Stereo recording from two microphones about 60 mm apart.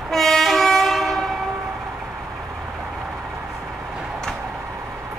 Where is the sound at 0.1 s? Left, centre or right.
Centre.